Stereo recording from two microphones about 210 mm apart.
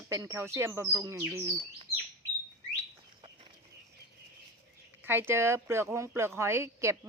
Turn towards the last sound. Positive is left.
turn(degrees=-15)  # may be behind; listen again after turning